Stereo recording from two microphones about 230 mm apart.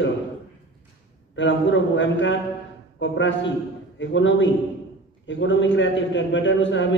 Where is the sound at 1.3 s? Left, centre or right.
Left.